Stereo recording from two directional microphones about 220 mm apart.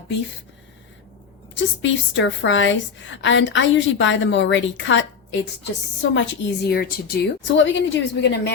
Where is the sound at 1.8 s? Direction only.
55° left (ahead or behind).